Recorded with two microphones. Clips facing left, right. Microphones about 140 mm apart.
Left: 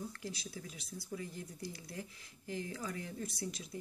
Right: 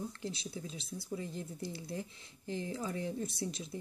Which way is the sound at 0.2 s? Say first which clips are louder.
Right 4 dB; 25° right (ahead or behind).